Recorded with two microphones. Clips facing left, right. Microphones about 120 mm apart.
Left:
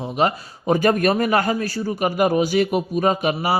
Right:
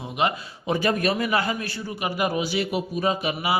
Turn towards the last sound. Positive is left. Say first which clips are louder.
# left 5 dB
turn(degrees=45)  # may be behind; listen again after turning